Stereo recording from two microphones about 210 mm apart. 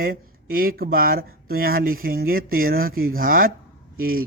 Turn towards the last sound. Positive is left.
turn(degrees=-45)  # may be behind; listen again after turning